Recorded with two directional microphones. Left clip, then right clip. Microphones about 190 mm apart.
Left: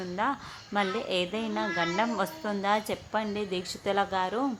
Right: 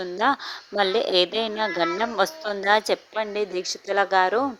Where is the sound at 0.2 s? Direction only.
40° right (ahead or behind).